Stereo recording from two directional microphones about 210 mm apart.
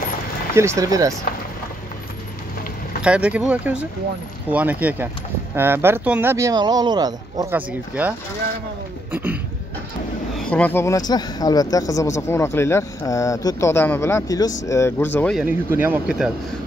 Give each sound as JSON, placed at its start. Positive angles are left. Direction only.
{"t": 0.6, "sound": "speech", "side_deg": -15}
{"t": 3.0, "sound": "speech", "side_deg": -5}
{"t": 9.1, "sound": "a sound", "side_deg": -10}
{"t": 10.3, "sound": "a man's voice", "side_deg": 5}
{"t": 15.4, "sound": "speech", "side_deg": -10}